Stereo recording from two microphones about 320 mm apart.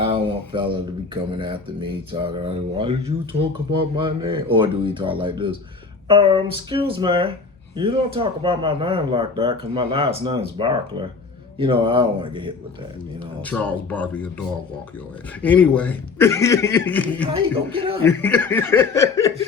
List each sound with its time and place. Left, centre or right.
0.0 s speech: centre
13.4 s a man's voice: centre